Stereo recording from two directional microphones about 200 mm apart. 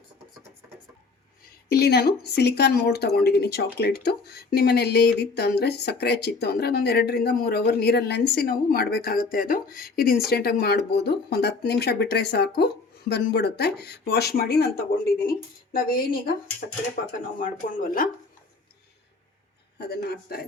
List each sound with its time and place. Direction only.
1.7 s speech: 55° left (ahead or behind)
19.8 s speech: 50° left (ahead or behind)